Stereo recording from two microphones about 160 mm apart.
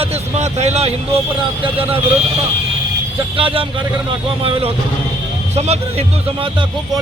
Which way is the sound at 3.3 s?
35° right (ahead or behind).